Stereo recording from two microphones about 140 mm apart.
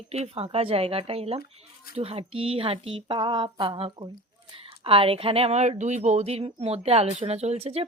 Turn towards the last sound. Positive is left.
turn(degrees=-45)  # may be behind; listen again after turning